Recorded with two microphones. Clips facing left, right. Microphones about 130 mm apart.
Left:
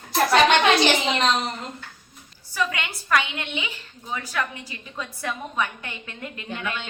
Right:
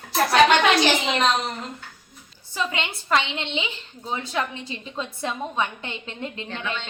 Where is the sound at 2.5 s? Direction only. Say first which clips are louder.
Even; 25° right (ahead or behind).